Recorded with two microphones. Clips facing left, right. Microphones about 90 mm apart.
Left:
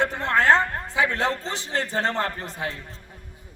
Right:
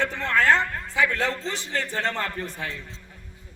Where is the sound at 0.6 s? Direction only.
40° left (ahead or behind).